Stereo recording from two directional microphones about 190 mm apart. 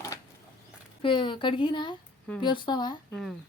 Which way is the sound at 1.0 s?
25° left (ahead or behind).